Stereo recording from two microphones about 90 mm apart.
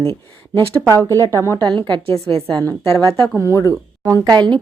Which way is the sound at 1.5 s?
55° right (ahead or behind).